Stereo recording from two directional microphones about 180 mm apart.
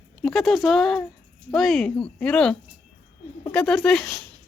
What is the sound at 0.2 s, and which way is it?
A woman's voice, centre (ahead or behind).